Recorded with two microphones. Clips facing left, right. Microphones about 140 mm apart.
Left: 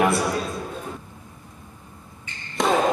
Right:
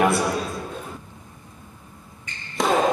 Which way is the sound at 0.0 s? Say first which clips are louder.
Right 1 dB; centre (ahead or behind).